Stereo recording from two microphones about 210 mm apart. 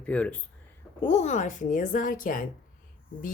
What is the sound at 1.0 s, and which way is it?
Speech, 30° left (ahead or behind).